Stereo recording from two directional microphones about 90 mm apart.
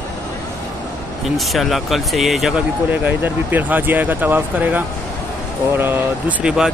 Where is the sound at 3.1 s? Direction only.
20° right (ahead or behind).